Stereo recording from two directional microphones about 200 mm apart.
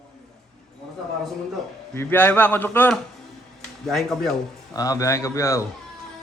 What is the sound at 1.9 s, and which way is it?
A man's voice, 10° left (ahead or behind).